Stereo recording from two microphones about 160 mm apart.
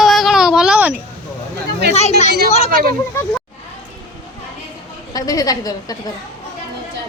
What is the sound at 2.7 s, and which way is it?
Speech, 65° right (ahead or behind).